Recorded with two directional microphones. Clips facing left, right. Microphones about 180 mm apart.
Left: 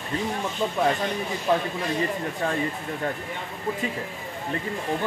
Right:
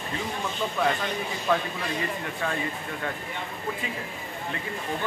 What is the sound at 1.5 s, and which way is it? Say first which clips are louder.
Speech: left 2 dB; 20° left (ahead or behind).